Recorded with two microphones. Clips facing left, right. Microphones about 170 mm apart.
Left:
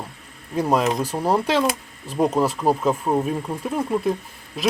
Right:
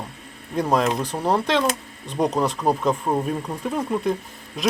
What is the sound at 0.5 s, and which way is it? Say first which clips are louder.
Speech: left 1 dB; 5° left (ahead or behind).